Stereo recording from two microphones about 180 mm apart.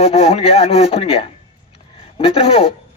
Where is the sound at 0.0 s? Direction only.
35° left (ahead or behind).